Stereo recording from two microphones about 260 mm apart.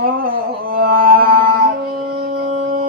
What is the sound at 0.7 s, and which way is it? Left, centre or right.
Carnatic music, right.